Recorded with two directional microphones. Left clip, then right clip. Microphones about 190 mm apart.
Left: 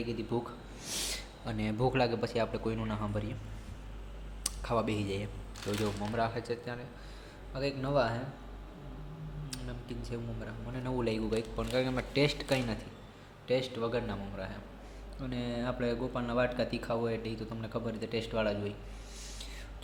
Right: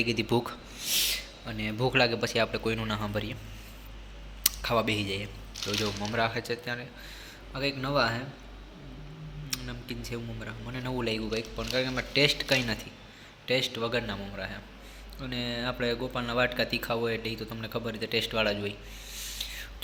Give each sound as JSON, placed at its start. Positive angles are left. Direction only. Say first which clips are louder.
{"t": 0.0, "sound": "speech", "louder": "right 8 dB", "side_deg": -10}
{"t": 0.8, "sound": "speech", "louder": "right 9 dB", "side_deg": 15}
{"t": 4.4, "sound": "speech", "louder": "right 6 dB", "side_deg": 0}
{"t": 9.5, "sound": "speech", "louder": "right 7 dB", "side_deg": -5}
{"t": 19.1, "sound": "rub", "louder": "right 11 dB", "side_deg": 5}